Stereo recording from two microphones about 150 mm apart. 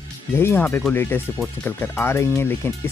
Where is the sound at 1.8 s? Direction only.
15° left (ahead or behind).